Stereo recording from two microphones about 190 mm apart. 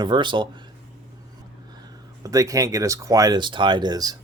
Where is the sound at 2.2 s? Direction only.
20° right (ahead or behind).